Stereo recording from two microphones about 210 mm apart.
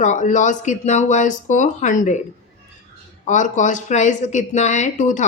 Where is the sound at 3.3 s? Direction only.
35° left (ahead or behind).